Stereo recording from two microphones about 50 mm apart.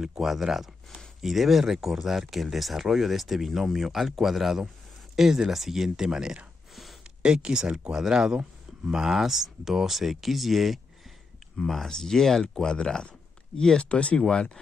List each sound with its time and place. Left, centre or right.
0.0 s speech: centre
6.7 s a sound: centre
7.2 s speech: centre